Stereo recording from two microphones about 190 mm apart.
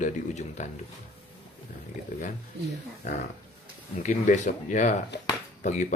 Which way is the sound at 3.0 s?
40° left (ahead or behind).